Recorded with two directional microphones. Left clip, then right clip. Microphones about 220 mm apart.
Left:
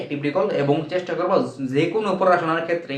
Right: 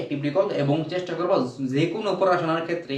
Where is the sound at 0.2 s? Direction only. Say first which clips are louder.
Left 2 dB; 15° left (ahead or behind).